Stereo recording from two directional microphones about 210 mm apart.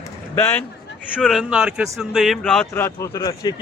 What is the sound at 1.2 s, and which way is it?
Speech, centre (ahead or behind).